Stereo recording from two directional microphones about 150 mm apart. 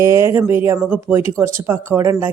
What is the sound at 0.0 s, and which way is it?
Speech, 20° right (ahead or behind).